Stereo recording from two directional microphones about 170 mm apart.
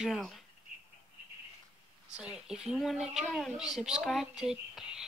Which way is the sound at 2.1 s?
5° right (ahead or behind).